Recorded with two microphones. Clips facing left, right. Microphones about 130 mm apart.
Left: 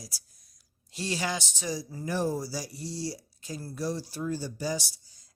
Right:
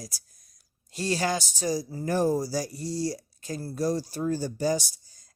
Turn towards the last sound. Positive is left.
turn(degrees=-45)  # may be behind; listen again after turning